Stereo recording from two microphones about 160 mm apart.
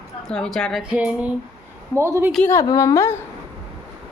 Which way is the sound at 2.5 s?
20° left (ahead or behind).